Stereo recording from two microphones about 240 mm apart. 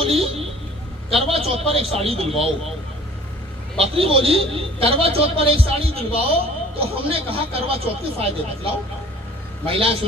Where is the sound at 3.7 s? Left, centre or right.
Right.